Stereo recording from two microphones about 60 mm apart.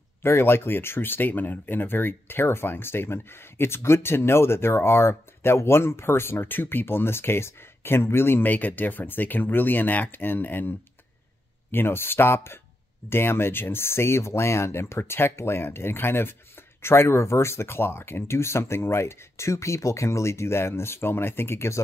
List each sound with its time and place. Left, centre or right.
0.2 s speech: left
11.7 s speech: left